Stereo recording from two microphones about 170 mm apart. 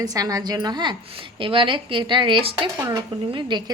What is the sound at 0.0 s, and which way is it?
A woman's voice, 20° right (ahead or behind).